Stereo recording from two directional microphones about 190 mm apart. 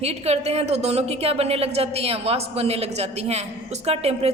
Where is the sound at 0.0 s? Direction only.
35° right (ahead or behind).